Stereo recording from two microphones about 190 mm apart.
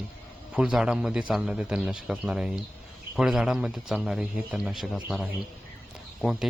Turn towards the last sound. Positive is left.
turn(degrees=0)  # may be behind; listen again after turning